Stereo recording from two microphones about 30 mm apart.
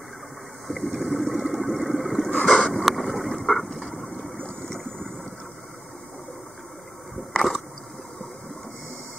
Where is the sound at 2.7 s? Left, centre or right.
Centre.